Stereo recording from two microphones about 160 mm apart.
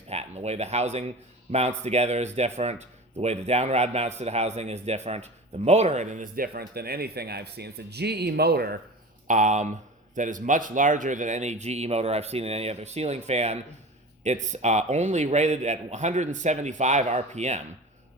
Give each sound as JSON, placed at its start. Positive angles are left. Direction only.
{"t": 0.1, "sound": "speech", "side_deg": -40}
{"t": 9.2, "sound": "speech", "side_deg": -50}